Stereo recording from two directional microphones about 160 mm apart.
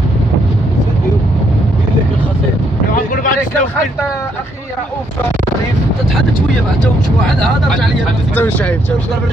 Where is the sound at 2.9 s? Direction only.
60° left (ahead or behind).